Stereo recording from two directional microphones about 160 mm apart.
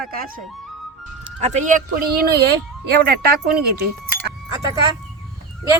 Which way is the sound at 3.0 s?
70° right (ahead or behind).